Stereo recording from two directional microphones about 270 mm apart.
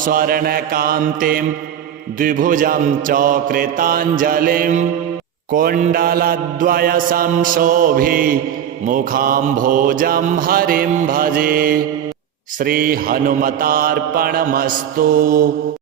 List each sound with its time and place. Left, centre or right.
0.0 s mantra: right